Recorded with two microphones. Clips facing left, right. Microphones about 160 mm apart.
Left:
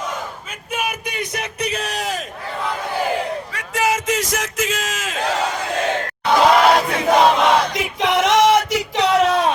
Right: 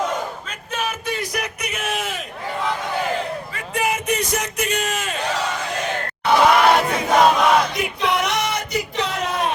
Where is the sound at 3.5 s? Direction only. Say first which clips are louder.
Left 3 dB; 90° left.